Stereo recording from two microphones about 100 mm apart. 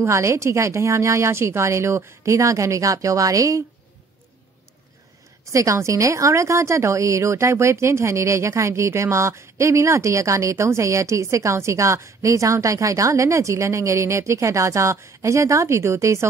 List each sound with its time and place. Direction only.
0.0 s speech: 30° right (ahead or behind)
5.5 s a woman's voice: 30° right (ahead or behind)